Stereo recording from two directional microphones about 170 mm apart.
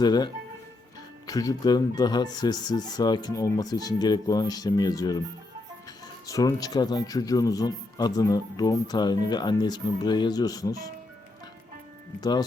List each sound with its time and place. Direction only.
0.0 s speech: 25° left (ahead or behind)
1.3 s speech: 20° left (ahead or behind)
6.2 s speech: 20° left (ahead or behind)
12.2 s speech: 25° left (ahead or behind)